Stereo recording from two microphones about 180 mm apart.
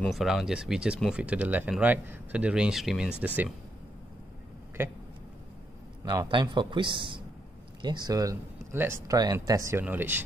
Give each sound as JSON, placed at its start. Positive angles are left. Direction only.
{"t": 0.0, "sound": "speech", "side_deg": 0}
{"t": 4.8, "sound": "speech", "side_deg": -10}
{"t": 6.0, "sound": "speech", "side_deg": -25}